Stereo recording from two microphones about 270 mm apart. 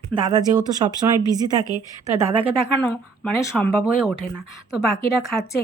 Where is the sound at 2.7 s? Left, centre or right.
Centre.